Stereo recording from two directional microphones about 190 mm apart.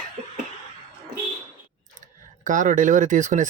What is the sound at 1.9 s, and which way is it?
Speech, 40° right (ahead or behind).